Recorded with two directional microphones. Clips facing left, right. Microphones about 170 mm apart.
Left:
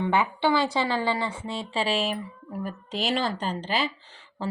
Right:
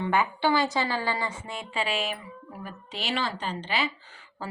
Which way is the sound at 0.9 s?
5° right (ahead or behind).